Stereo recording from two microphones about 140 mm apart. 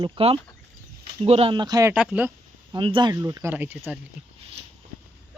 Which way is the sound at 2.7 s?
35° right (ahead or behind).